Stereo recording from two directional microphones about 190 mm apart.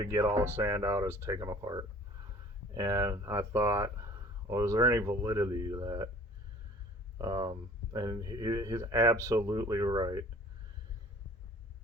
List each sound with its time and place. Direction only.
0.0 s speech: 15° right (ahead or behind)
7.2 s speech: 20° right (ahead or behind)